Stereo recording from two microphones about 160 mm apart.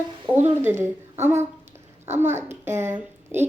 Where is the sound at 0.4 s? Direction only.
15° right (ahead or behind).